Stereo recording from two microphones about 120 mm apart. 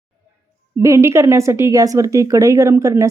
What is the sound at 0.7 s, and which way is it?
Speech, 25° right (ahead or behind).